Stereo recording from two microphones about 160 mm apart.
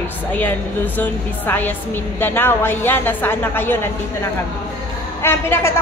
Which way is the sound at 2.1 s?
15° left (ahead or behind).